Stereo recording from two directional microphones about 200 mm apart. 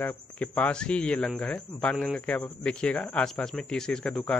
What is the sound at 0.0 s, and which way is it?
A man's voice, 5° left (ahead or behind).